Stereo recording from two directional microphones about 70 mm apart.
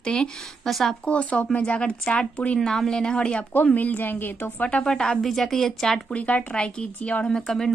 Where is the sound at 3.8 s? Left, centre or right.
Left.